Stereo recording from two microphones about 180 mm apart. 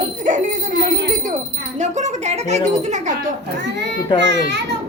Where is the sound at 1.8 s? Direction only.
40° right (ahead or behind).